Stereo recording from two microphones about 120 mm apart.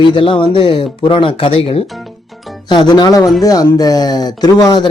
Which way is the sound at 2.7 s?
40° left (ahead or behind).